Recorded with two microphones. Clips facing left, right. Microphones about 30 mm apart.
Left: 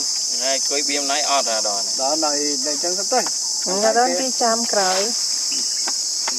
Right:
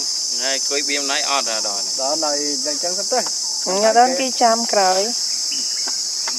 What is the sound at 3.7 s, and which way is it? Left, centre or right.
Speech, right.